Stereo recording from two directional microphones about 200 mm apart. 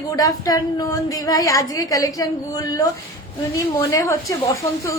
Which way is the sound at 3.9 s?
15° left (ahead or behind).